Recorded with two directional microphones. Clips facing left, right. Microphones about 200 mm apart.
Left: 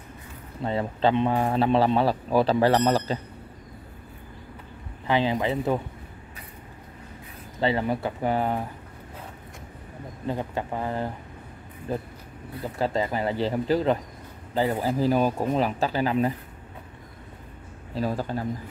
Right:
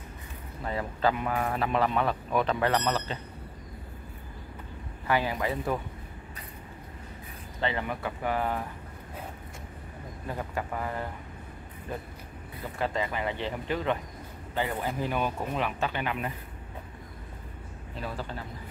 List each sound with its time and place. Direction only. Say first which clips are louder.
0.6 s a man's voice: left 5 dB; 25° left (ahead or behind)
5.0 s a man's voice: left 4 dB; 20° left (ahead or behind)
7.6 s a man's voice: left 6 dB; 30° left (ahead or behind)
10.2 s a man's voice: left 5 dB; 25° left (ahead or behind)
17.9 s speech: left 9 dB; 40° left (ahead or behind)